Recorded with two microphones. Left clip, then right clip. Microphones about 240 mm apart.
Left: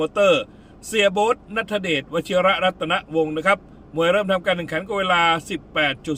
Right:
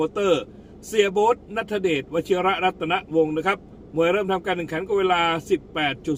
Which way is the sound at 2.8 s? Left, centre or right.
Centre.